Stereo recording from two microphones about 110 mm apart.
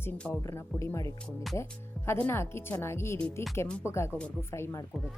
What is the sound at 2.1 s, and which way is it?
A woman's voice, 20° left (ahead or behind).